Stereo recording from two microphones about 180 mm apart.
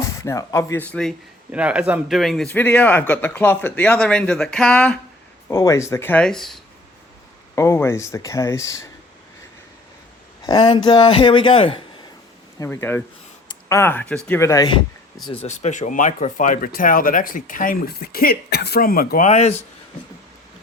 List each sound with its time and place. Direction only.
0.0 s speech: 15° left (ahead or behind)
1.5 s a man's voice: 5° right (ahead or behind)
5.5 s speech: 15° left (ahead or behind); by 6.6 s centre (ahead or behind)
7.5 s speech: 15° left (ahead or behind)
10.4 s speech: 25° left (ahead or behind)
12.5 s speech: 15° left (ahead or behind)
15.3 s speech: 35° left (ahead or behind)